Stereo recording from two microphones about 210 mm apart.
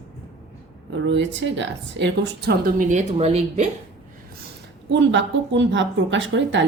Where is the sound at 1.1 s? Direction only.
60° right (ahead or behind); by 3.6 s 30° right (ahead or behind).